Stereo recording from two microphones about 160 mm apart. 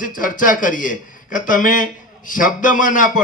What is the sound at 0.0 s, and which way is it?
A man's voice, 60° left (ahead or behind).